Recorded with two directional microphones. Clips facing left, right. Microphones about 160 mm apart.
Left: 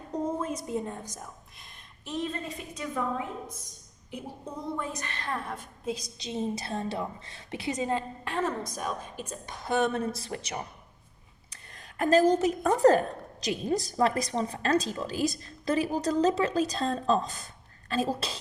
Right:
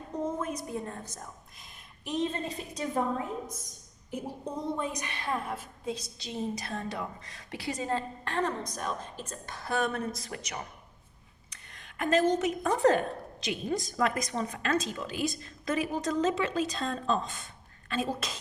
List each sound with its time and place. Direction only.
0.3 s a sound: 30° left (ahead or behind)
0.9 s a woman's voice: 10° left (ahead or behind)
2.0 s a woman's voice: 20° right (ahead or behind)
4.8 s a woman's voice: 15° right (ahead or behind)
5.8 s a woman's voice: 10° left (ahead or behind); by 18.3 s 35° left (ahead or behind)